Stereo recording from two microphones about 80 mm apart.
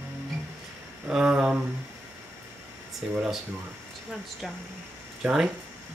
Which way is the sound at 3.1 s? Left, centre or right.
Centre.